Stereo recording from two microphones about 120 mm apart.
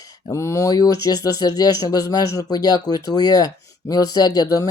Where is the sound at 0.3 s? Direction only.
25° left (ahead or behind).